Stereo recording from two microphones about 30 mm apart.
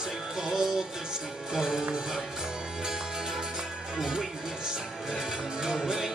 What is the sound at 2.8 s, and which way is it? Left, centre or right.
Music, right.